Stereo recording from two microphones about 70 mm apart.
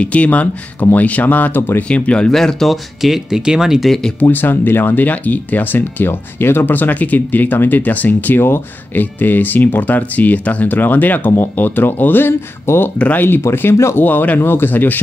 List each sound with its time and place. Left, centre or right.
0.0 s speech: centre
1.9 s speech: centre
4.2 s speech: left
14.0 s speech: left